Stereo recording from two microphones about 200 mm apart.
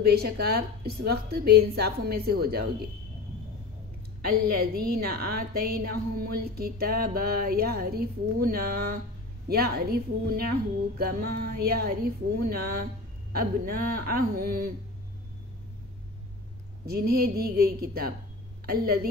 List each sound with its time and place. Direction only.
0.0 s a woman's voice: 50° right (ahead or behind)
4.3 s a woman's voice: 50° right (ahead or behind)
16.8 s a woman's voice: 50° right (ahead or behind)